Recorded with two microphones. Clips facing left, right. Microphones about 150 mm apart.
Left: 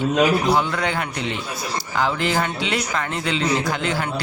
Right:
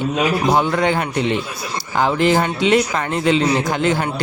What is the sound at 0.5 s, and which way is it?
Speech, 45° right (ahead or behind).